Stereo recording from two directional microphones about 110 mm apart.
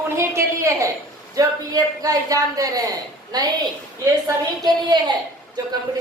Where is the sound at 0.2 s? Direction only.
25° right (ahead or behind).